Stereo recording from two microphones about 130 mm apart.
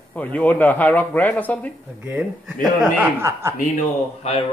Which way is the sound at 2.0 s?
10° right (ahead or behind).